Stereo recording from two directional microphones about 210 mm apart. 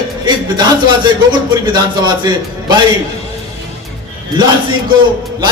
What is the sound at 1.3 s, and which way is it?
Speech, 20° right (ahead or behind).